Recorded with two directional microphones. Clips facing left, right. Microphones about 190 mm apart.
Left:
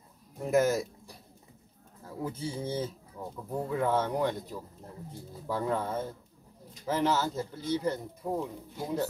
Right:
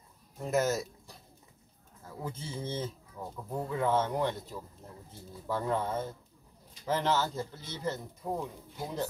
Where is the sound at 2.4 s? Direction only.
10° left (ahead or behind).